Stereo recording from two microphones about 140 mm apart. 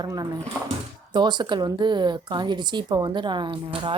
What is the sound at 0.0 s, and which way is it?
A woman's voice, 30° right (ahead or behind).